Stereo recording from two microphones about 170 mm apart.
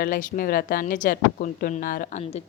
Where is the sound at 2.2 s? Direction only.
40° left (ahead or behind).